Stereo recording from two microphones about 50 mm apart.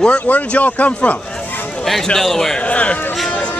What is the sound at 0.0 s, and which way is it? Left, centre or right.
Speech, left.